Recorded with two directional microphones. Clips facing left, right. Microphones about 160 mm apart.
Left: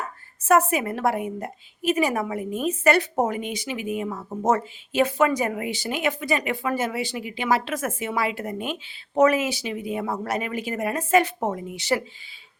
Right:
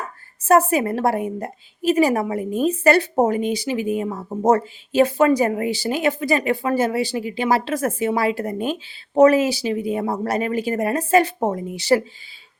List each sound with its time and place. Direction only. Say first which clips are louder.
0.4 s speech: right 4 dB; 35° right (ahead or behind)